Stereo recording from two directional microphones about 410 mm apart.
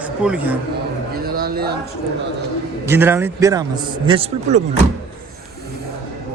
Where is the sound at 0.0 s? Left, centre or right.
Centre.